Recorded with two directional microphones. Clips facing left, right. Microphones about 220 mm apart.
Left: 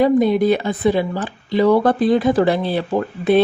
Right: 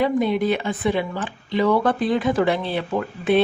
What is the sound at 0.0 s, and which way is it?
Speech, 40° left (ahead or behind).